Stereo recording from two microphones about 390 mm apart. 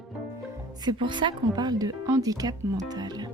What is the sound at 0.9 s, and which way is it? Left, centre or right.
Speech, centre.